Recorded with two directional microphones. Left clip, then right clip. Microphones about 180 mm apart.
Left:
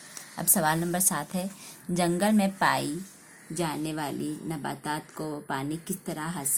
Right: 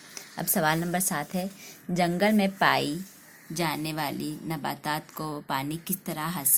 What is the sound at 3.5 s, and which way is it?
A woman's voice, 40° right (ahead or behind).